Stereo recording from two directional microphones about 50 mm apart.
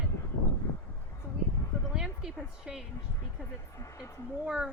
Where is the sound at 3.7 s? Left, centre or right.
Left.